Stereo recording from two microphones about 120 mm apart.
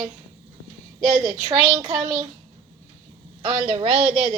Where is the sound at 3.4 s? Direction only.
40° right (ahead or behind).